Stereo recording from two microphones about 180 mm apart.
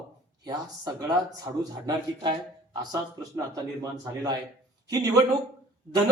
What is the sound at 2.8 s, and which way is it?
Speech, 20° right (ahead or behind).